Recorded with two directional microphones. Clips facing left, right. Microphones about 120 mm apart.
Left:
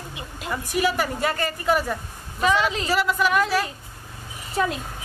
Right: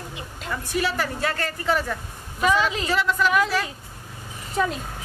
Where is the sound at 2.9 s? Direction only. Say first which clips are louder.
Left 1 dB; 10° left (ahead or behind).